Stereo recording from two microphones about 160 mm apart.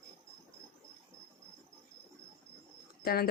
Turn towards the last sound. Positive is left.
turn(degrees=70)  # may be behind; listen again after turning